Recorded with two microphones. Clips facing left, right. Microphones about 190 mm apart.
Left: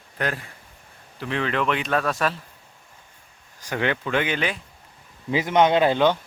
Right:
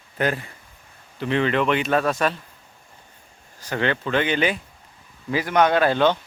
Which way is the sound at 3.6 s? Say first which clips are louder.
Right 1 dB; 10° left (ahead or behind).